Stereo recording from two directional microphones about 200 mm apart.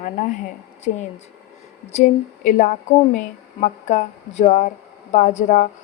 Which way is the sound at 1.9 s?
35° left (ahead or behind).